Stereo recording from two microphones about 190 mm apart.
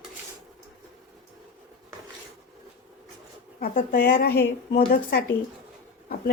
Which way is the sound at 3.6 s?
45° left (ahead or behind).